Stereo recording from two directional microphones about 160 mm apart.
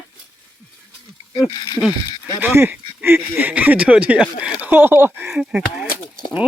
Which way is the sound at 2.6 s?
15° right (ahead or behind).